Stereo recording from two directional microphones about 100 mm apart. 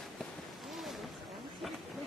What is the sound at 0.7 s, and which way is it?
Boat, centre (ahead or behind).